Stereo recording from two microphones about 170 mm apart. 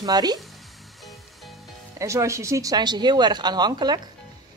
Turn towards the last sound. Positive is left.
turn(degrees=-25)  # may be behind; listen again after turning